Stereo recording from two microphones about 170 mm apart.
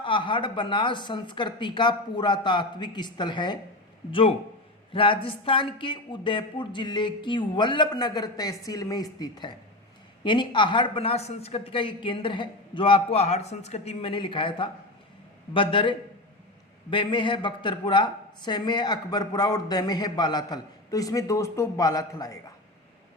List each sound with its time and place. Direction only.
0.0 s speech: 30° left (ahead or behind)